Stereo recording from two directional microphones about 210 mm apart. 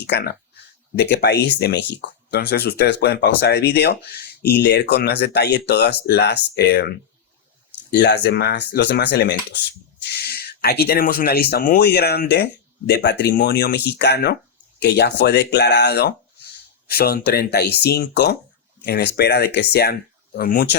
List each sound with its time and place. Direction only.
0.1 s speech: 50° left (ahead or behind)